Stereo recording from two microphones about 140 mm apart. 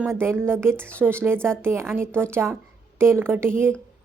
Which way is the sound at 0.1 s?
20° right (ahead or behind).